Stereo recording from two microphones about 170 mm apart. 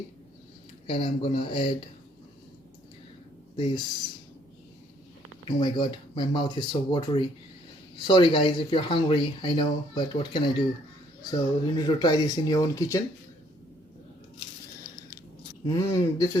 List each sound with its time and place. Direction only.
0.9 s speech: 30° left (ahead or behind)
3.5 s speech: 25° left (ahead or behind)
5.5 s speech: 25° left (ahead or behind)
15.6 s speech: 20° left (ahead or behind)